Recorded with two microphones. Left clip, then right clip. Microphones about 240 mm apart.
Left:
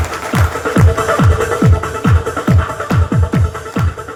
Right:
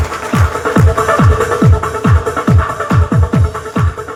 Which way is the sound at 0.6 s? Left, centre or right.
Right.